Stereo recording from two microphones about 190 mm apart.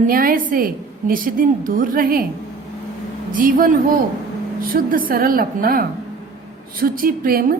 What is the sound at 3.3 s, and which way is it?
A woman's voice, 45° right (ahead or behind).